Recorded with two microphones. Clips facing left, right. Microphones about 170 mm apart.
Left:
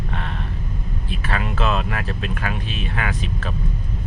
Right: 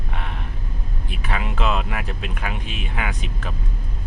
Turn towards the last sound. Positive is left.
turn(degrees=-15)  # may be behind; listen again after turning